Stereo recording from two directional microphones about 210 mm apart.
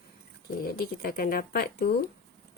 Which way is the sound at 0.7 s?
45° left (ahead or behind).